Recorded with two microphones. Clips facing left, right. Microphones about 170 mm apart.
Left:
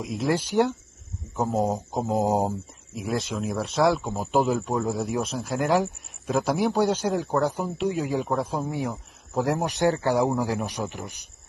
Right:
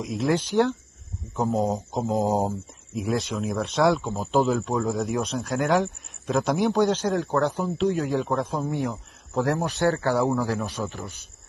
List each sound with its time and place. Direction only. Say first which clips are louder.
0.0 s speech: right 1 dB; centre (ahead or behind)
2.9 s speech: right 2 dB; centre (ahead or behind)
4.0 s speech: right 1 dB; 10° left (ahead or behind)
9.6 s speech: even; 15° left (ahead or behind)